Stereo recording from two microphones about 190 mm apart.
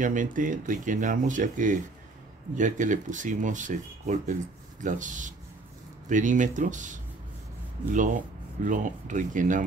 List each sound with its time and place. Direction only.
0.0 s speech: 45° right (ahead or behind)
8.6 s speech: 40° right (ahead or behind)